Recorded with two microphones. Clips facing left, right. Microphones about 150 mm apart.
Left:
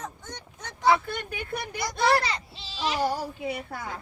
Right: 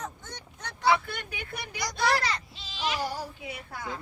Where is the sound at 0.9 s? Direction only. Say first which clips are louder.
Left 3 dB; 45° left (ahead or behind).